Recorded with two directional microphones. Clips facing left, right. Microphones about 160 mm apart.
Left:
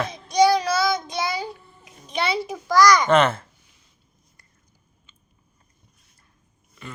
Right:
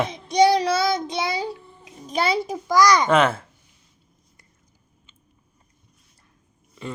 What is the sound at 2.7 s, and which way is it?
Speech, 20° right (ahead or behind).